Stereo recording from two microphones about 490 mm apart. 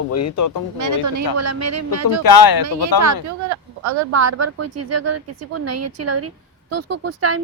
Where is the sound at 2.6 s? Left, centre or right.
Right.